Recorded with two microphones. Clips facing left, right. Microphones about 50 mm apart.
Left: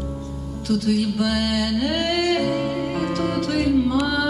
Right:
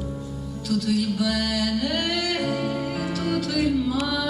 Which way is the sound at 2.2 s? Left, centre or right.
Left.